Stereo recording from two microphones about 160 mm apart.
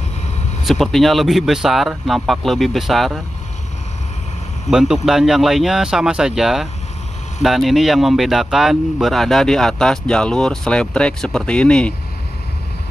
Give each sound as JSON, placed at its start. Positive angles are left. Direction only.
{"t": 0.7, "sound": "speech", "side_deg": 0}
{"t": 4.6, "sound": "speech", "side_deg": -5}